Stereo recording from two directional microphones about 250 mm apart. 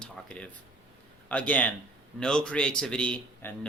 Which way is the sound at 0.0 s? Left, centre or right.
Centre.